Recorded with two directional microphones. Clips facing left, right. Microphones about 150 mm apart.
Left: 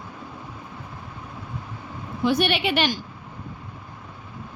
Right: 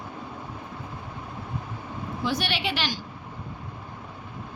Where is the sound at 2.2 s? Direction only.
55° left (ahead or behind).